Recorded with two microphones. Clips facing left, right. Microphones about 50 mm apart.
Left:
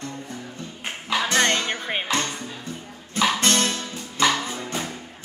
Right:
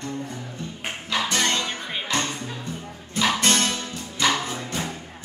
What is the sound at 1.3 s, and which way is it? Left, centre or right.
Music, left.